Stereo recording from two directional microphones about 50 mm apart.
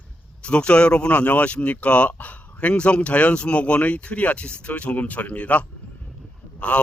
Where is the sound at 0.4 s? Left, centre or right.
Left.